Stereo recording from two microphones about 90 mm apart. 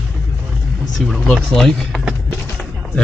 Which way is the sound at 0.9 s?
Centre (ahead or behind).